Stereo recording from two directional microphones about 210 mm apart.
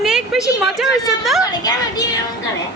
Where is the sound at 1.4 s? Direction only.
15° left (ahead or behind).